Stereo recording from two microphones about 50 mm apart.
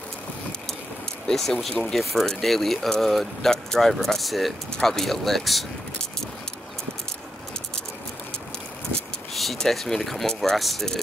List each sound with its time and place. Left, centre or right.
1.2 s speech: centre
9.3 s speech: centre